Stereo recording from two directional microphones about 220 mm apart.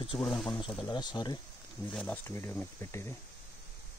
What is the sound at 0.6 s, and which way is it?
Speech, 20° left (ahead or behind).